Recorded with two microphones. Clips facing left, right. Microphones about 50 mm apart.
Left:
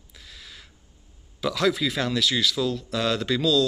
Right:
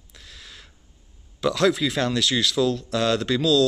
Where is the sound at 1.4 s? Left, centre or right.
Centre.